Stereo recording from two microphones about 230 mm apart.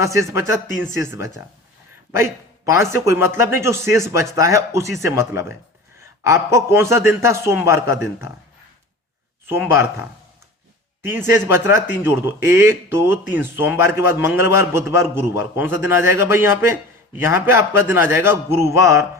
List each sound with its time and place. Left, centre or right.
0.0 s speech: centre
9.5 s speech: centre